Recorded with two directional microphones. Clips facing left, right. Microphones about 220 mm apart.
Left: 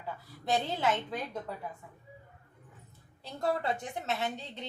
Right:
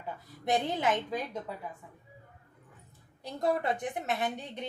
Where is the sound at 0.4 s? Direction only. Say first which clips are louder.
Right 1 dB; 20° right (ahead or behind).